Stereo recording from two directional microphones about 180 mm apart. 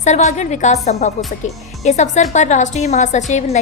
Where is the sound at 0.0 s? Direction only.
40° left (ahead or behind).